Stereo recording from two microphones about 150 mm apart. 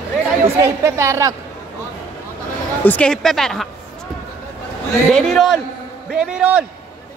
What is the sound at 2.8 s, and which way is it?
Speech, 5° left (ahead or behind).